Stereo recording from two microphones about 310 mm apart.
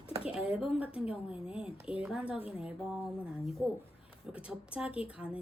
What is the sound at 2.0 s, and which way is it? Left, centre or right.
Speech, centre.